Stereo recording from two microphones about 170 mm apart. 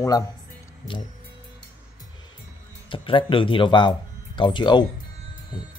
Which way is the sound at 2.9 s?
30° left (ahead or behind).